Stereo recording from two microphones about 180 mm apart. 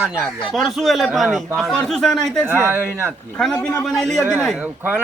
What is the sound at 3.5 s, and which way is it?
Speech, 20° left (ahead or behind).